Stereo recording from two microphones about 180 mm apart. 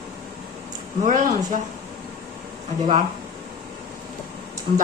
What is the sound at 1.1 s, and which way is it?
Speech, 45° right (ahead or behind).